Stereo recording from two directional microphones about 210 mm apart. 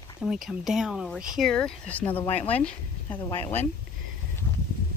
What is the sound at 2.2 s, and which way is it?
Speech, 30° left (ahead or behind).